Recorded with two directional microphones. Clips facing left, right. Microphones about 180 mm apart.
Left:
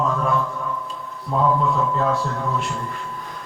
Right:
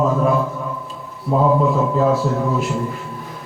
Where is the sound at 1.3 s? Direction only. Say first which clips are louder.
Right 4 dB; 10° right (ahead or behind).